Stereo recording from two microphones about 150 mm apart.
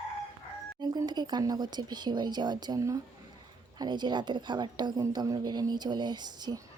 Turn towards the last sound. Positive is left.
turn(degrees=-30)  # may be behind; listen again after turning